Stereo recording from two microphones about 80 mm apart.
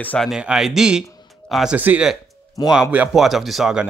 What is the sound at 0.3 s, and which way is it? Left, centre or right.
Speech, centre.